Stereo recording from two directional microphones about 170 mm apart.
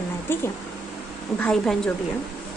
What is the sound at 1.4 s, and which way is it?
Speech, 5° left (ahead or behind).